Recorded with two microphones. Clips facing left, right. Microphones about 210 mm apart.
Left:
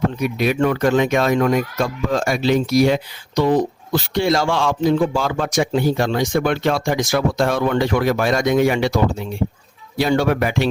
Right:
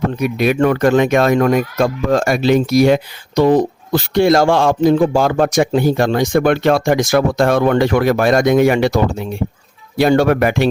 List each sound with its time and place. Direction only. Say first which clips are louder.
0.2 s speech: right 6 dB; 60° right (ahead or behind)
10.0 s speech: right 5 dB; 55° right (ahead or behind)